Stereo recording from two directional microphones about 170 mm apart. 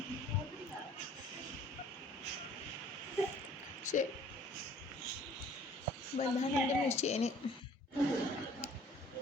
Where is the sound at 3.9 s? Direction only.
45° left (ahead or behind).